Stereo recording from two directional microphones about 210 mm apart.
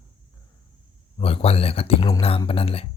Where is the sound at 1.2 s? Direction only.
25° left (ahead or behind).